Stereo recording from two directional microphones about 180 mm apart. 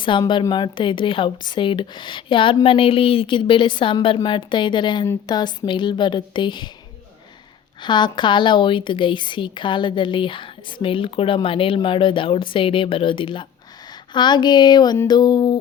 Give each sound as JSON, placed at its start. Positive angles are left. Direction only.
{"t": 0.0, "sound": "a woman's voice", "side_deg": 25}
{"t": 7.8, "sound": "a woman's voice", "side_deg": 25}